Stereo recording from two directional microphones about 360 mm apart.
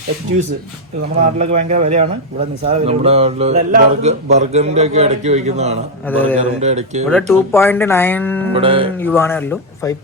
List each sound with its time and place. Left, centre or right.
1.2 s speech: centre
6.1 s speech: centre
6.6 s speech: centre
7.1 s speech: centre
8.5 s speech: centre
9.0 s speech: centre